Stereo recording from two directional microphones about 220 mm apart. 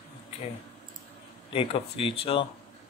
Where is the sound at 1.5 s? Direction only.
25° left (ahead or behind).